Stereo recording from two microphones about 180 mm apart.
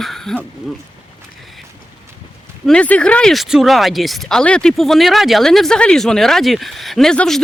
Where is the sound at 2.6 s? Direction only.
5° left (ahead or behind).